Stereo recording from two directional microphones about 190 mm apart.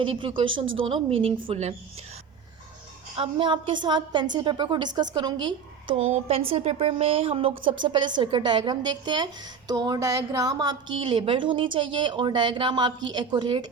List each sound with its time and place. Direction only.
0.0 s a woman's voice: 30° right (ahead or behind)
3.2 s a woman's voice: 25° right (ahead or behind)